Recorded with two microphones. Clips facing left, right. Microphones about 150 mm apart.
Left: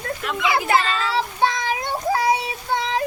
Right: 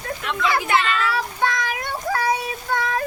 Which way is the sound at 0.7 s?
35° left (ahead or behind).